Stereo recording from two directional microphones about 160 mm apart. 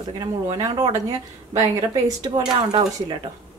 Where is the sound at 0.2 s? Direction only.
20° right (ahead or behind).